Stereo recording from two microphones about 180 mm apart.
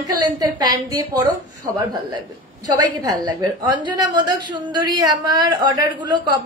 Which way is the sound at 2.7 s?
20° right (ahead or behind).